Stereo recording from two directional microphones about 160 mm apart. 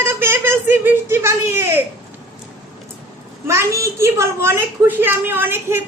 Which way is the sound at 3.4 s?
15° right (ahead or behind).